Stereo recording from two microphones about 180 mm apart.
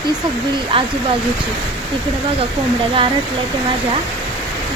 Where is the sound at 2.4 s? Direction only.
30° right (ahead or behind).